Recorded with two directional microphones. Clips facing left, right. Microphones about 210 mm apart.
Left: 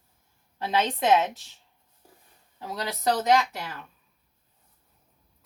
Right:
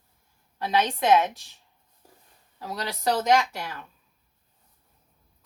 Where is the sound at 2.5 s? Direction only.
20° left (ahead or behind).